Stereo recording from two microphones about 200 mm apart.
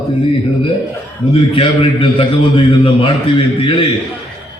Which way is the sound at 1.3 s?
25° left (ahead or behind).